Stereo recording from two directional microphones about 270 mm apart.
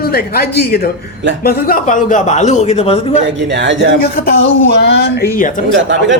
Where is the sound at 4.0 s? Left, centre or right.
Left.